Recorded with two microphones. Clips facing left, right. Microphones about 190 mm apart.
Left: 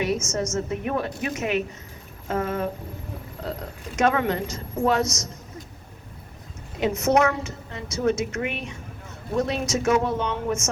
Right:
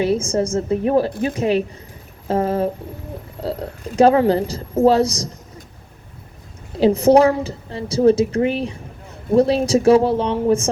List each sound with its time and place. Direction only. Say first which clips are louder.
0.0 s a woman's voice: right 7 dB; 30° right (ahead or behind)
6.7 s a woman's voice: right 8 dB; 30° right (ahead or behind)